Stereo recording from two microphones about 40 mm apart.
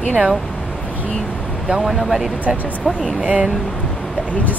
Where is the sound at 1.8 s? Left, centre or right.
Centre.